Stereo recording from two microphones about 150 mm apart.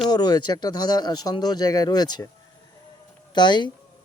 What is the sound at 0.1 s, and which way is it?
Speech, 30° left (ahead or behind).